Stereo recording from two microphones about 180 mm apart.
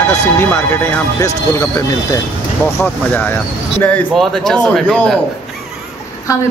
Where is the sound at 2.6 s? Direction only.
10° left (ahead or behind).